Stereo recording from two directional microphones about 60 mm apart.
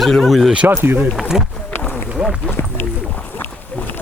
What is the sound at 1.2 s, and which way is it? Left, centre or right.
Speech, centre.